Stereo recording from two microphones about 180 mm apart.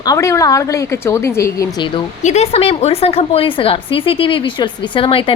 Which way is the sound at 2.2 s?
35° left (ahead or behind).